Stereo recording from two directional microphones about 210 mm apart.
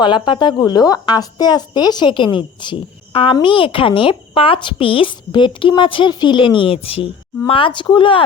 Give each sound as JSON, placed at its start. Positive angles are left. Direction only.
{"t": 0.0, "sound": "a woman's voice", "side_deg": 20}